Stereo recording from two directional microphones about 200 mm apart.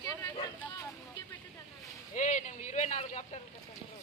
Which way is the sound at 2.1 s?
40° left (ahead or behind).